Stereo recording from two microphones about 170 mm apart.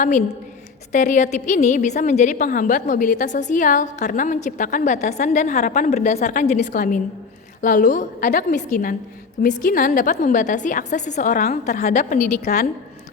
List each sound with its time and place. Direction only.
0.9 s a woman's voice: 45° left (ahead or behind)